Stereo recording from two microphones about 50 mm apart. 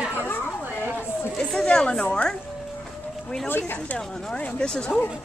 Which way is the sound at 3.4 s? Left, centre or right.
Left.